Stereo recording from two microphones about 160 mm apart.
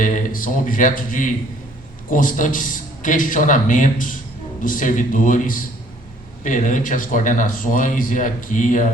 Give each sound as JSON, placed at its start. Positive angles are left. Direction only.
{"t": 0.0, "sound": "speech", "side_deg": 55}